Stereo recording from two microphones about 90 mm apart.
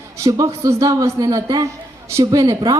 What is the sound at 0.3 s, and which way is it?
A woman's voice, 40° right (ahead or behind).